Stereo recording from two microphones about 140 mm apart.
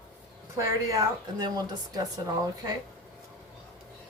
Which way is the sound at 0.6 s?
25° right (ahead or behind).